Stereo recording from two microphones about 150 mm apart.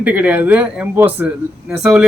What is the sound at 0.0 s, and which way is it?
A man's voice, 10° right (ahead or behind).